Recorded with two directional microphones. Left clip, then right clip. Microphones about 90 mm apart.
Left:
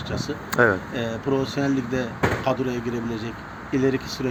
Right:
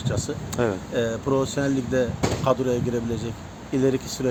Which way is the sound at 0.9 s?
50° right (ahead or behind).